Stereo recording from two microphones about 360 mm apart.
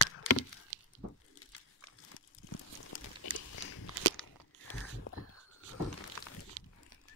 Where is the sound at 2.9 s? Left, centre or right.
Left.